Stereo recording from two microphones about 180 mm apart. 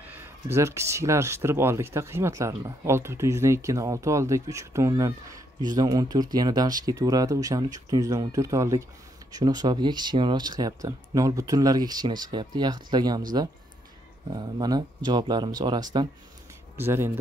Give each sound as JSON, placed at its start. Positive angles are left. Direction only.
{"t": 0.1, "sound": "speech", "side_deg": -15}
{"t": 14.3, "sound": "speech", "side_deg": -20}